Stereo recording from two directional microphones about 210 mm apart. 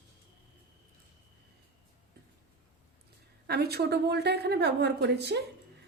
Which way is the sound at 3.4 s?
50° right (ahead or behind).